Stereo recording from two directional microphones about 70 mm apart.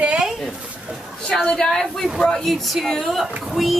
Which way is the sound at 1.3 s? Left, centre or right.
Centre.